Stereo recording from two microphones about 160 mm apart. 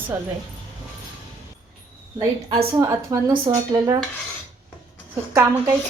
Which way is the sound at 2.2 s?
20° right (ahead or behind).